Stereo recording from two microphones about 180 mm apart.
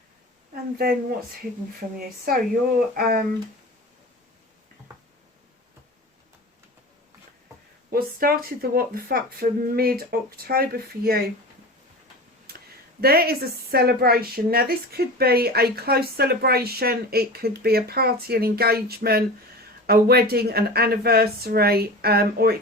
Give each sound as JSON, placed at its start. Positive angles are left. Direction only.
{"t": 2.0, "sound": "speech", "side_deg": -55}
{"t": 7.9, "sound": "speech", "side_deg": -55}
{"t": 12.5, "sound": "speech", "side_deg": -60}